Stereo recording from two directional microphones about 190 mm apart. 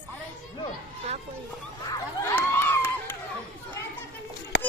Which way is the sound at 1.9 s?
15° left (ahead or behind).